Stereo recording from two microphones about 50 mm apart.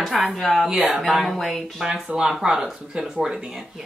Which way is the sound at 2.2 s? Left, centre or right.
Centre.